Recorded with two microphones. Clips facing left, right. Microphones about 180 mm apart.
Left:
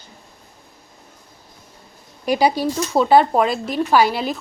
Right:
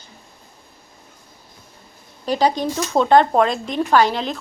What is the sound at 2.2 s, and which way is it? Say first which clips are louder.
Speech: left 1 dB; 10° left (ahead or behind).